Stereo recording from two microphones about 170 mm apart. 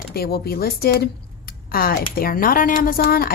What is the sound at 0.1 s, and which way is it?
Speech, 65° left (ahead or behind).